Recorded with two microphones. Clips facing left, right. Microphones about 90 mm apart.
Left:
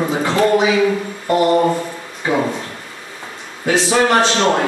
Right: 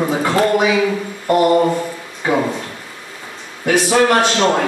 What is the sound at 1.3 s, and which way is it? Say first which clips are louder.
Speech: right 1 dB; 10° right (ahead or behind).